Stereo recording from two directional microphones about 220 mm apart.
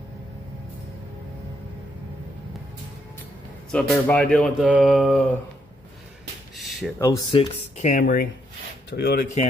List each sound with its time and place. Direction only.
3.7 s speech: centre (ahead or behind)
7.0 s speech: 15° left (ahead or behind); by 9.2 s 50° left (ahead or behind)